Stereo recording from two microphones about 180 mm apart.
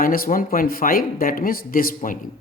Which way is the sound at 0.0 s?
50° left (ahead or behind).